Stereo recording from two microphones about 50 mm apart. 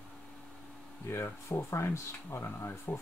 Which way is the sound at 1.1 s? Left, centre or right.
Left.